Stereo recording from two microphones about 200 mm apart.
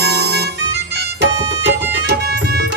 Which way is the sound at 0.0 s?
55° right (ahead or behind).